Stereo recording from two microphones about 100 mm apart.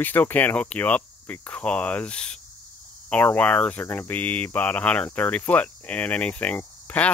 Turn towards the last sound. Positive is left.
turn(degrees=15)  # may be behind; listen again after turning